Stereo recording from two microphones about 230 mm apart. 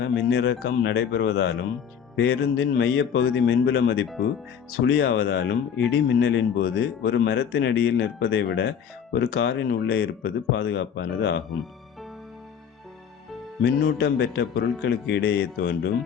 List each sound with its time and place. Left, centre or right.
0.0 s speech: left
13.6 s speech: left